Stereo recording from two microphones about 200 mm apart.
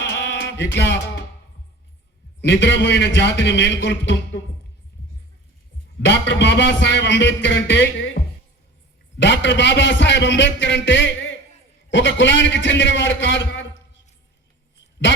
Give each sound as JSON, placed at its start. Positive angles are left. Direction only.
{"t": 0.0, "sound": "music", "side_deg": 60}
{"t": 2.5, "sound": "a man's voice", "side_deg": 60}
{"t": 6.1, "sound": "a man's voice", "side_deg": 60}
{"t": 9.1, "sound": "a man's voice", "side_deg": 60}